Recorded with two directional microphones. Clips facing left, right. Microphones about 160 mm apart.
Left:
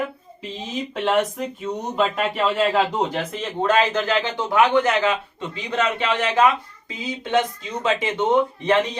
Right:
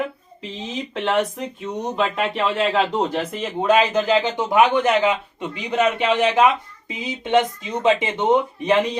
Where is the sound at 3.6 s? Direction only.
15° right (ahead or behind).